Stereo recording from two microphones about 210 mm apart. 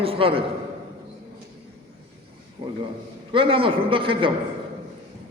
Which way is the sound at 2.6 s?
25° right (ahead or behind).